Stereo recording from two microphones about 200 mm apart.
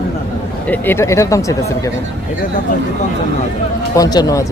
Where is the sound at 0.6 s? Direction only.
10° left (ahead or behind).